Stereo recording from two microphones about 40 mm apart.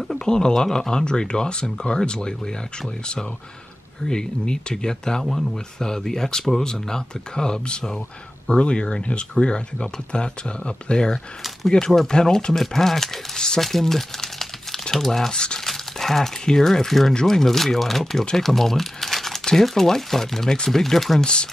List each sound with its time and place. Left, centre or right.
0.1 s speech: centre
4.0 s speech: centre
12.5 s speech: centre
15.6 s crumpling: centre
16.4 s speech: centre